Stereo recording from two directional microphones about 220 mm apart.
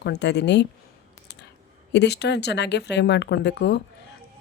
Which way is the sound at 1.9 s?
50° left (ahead or behind).